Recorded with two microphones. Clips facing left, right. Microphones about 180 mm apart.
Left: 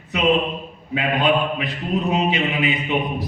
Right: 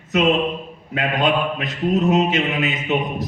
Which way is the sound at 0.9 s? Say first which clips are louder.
Even; 45° right (ahead or behind).